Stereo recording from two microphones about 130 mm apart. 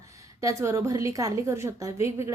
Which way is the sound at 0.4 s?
25° right (ahead or behind).